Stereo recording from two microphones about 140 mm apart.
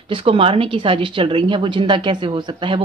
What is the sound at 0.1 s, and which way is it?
A woman's voice, 40° right (ahead or behind).